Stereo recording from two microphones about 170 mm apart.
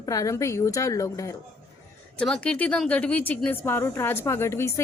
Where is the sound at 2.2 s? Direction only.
5° left (ahead or behind).